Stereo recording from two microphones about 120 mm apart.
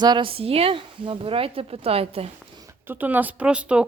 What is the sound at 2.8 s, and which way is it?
A woman's voice, 15° right (ahead or behind).